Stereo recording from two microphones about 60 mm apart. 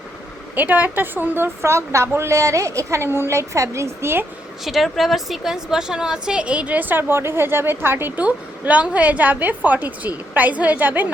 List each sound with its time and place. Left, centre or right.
0.5 s a woman's voice: right
1.6 s a woman's voice: right
4.6 s a woman's voice: centre; by 8.2 s right
8.2 s a woman's voice: right